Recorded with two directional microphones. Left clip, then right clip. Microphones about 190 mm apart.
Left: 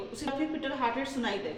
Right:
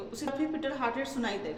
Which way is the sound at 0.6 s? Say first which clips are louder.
Left 1 dB; 10° right (ahead or behind).